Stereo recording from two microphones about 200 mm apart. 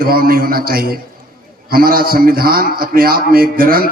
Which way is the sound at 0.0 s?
45° right (ahead or behind).